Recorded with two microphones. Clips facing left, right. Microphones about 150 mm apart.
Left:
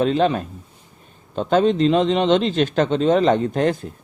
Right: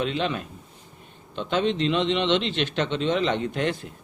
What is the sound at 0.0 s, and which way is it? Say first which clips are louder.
A man's voice: left 8 dB; 40° left (ahead or behind).